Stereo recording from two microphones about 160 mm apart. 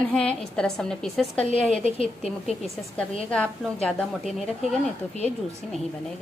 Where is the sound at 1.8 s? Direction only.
35° left (ahead or behind).